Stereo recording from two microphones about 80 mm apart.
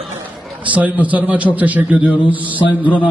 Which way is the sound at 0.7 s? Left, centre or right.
Centre.